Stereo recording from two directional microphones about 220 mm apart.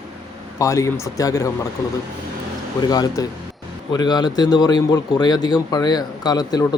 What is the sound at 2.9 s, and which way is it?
A man's voice, 20° left (ahead or behind).